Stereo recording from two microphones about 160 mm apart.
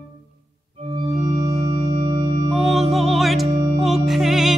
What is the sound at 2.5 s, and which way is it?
Music, centre (ahead or behind).